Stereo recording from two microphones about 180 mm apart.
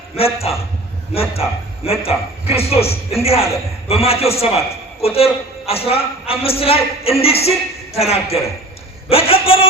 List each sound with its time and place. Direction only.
0.3 s a man's voice: 35° left (ahead or behind)